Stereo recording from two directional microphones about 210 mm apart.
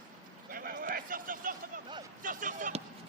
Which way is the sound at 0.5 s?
45° right (ahead or behind).